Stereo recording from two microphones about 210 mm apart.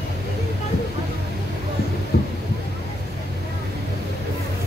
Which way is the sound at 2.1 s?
50° left (ahead or behind).